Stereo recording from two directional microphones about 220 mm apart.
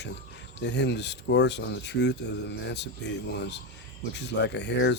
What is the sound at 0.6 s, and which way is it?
Speech, 50° left (ahead or behind).